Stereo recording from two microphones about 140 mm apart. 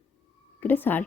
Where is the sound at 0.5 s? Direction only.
15° left (ahead or behind).